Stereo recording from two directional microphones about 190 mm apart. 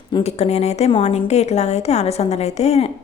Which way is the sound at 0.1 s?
35° left (ahead or behind).